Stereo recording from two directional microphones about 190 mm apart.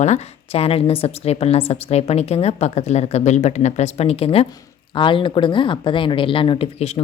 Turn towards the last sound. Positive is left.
turn(degrees=35)  # may be behind; listen again after turning